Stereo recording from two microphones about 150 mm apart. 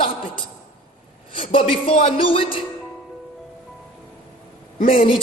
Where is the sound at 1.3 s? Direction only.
35° left (ahead or behind).